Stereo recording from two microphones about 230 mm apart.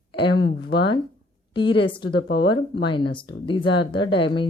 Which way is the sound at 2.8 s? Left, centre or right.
Left.